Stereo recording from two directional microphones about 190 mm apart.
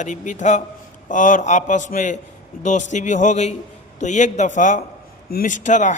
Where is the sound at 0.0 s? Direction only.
40° left (ahead or behind).